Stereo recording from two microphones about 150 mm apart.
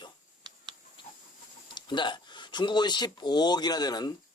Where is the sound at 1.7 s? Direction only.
30° left (ahead or behind).